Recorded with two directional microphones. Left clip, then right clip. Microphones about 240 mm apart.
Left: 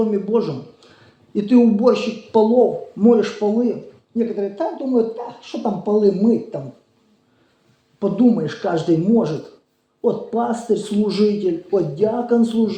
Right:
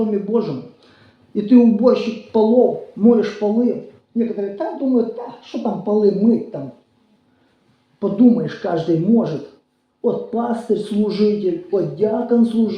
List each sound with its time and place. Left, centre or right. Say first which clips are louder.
0.1 s a man's voice: even; left
7.9 s speech: right 2 dB; left